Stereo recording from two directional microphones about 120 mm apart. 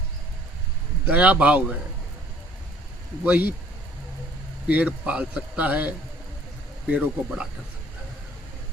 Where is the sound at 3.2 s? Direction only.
15° right (ahead or behind).